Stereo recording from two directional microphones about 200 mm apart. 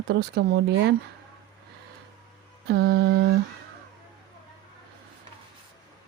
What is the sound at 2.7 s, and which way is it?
Mantra, 55° right (ahead or behind).